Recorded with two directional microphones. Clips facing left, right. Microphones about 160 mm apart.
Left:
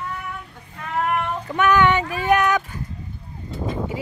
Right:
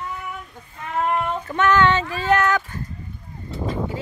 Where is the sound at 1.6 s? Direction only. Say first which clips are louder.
Even; 15° left (ahead or behind).